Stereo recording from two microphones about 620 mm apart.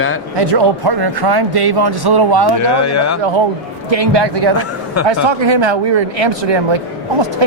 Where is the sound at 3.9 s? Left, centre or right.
Right.